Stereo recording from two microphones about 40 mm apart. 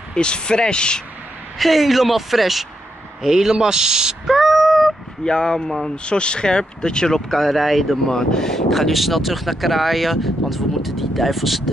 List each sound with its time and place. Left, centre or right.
0.1 s speech: left
1.6 s speech: centre
5.2 s speech: centre
6.0 s speech: left; by 8.0 s centre
8.1 s speech: centre